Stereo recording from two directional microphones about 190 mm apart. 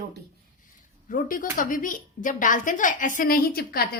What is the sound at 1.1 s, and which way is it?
A woman's voice, 45° left (ahead or behind).